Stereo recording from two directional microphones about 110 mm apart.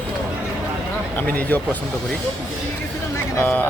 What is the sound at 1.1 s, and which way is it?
Speech, 15° left (ahead or behind).